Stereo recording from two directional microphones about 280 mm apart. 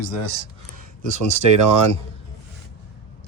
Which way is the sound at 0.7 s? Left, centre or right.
Right.